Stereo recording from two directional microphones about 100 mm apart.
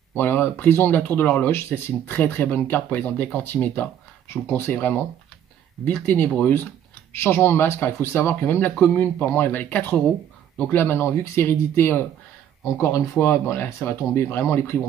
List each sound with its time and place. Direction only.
0.1 s speech: 20° left (ahead or behind)